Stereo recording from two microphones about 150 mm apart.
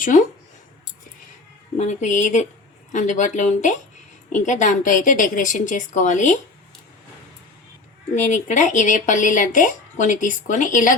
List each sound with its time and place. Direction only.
0.0 s speech: 60° left (ahead or behind)
1.8 s speech: 50° left (ahead or behind)
8.1 s speech: 55° left (ahead or behind)